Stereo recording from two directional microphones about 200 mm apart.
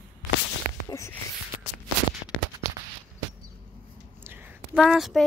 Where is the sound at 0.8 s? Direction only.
15° left (ahead or behind).